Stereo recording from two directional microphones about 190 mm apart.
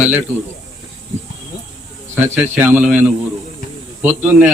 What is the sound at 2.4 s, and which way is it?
Speech, 10° right (ahead or behind).